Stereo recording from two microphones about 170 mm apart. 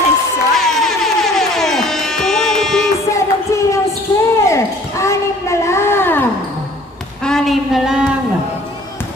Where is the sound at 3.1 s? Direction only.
15° left (ahead or behind).